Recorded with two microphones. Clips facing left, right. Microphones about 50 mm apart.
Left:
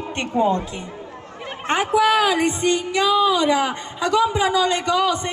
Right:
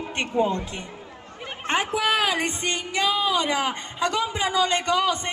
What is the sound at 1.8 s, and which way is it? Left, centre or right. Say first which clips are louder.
A woman's voice: left 6 dB; right.